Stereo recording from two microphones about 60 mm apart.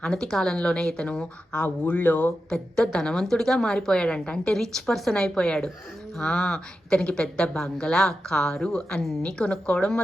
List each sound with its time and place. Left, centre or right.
0.0 s a woman's voice: centre
1.6 s speech: left
2.5 s a woman's voice: centre